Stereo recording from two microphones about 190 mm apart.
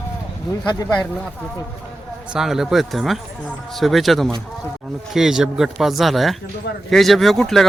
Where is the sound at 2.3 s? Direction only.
Centre (ahead or behind).